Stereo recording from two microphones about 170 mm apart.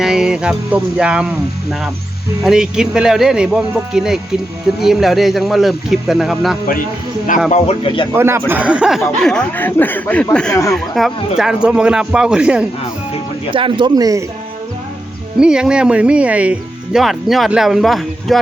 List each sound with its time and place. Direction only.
0.0 s speech: 5° right (ahead or behind)
2.4 s speech: 5° right (ahead or behind)
7.5 s speech: 35° left (ahead or behind)
8.1 s speech: 15° right (ahead or behind); by 10.5 s 5° left (ahead or behind)
10.5 s speech: 15° left (ahead or behind)
10.8 s speech: centre (ahead or behind)
13.5 s speech: 30° right (ahead or behind)
15.4 s speech: 5° right (ahead or behind)